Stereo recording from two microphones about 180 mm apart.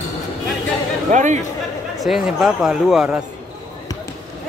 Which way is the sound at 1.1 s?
45° right (ahead or behind).